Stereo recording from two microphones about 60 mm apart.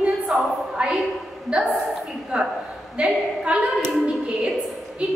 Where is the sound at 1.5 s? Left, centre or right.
Centre.